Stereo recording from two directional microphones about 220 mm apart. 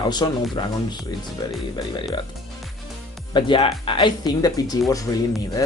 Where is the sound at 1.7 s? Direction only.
20° left (ahead or behind).